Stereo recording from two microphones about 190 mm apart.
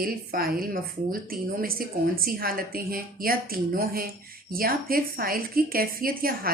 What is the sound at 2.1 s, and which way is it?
A woman's voice, 50° right (ahead or behind).